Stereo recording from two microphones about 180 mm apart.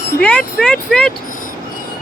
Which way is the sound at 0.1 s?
5° left (ahead or behind).